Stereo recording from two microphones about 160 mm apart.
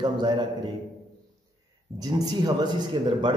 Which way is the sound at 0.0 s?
30° right (ahead or behind).